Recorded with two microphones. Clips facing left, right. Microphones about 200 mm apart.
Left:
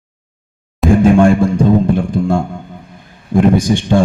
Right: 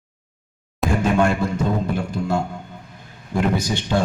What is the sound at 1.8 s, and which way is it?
Music, 50° left (ahead or behind).